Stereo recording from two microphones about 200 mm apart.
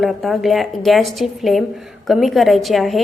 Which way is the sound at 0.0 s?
Centre (ahead or behind).